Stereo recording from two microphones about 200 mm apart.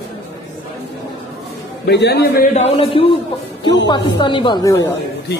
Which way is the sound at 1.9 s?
60° left (ahead or behind).